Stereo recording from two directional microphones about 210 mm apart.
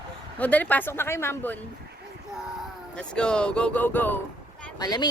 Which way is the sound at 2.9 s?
5° left (ahead or behind).